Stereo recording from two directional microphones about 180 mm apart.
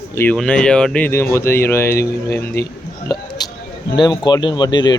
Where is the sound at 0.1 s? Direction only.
10° left (ahead or behind).